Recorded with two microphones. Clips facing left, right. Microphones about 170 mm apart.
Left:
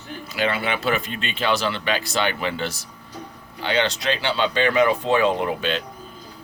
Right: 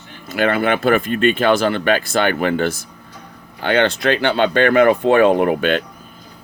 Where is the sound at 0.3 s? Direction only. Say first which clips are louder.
Right 7 dB; 50° right (ahead or behind).